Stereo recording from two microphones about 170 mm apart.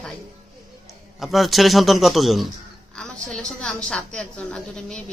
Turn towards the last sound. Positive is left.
turn(degrees=5)  # may be behind; listen again after turning